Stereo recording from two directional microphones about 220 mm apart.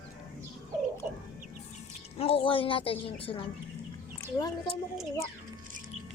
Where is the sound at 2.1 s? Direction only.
25° left (ahead or behind).